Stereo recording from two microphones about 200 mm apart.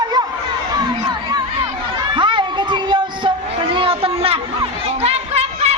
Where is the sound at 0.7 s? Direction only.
20° right (ahead or behind).